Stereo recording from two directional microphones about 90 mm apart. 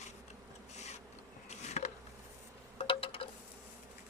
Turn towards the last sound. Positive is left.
turn(degrees=90)